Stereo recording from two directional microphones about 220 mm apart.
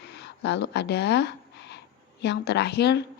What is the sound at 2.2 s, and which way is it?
Speech, 50° left (ahead or behind).